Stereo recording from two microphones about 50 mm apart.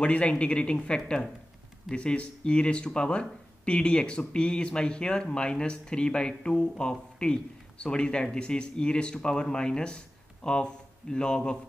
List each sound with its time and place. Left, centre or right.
0.0 s speech: left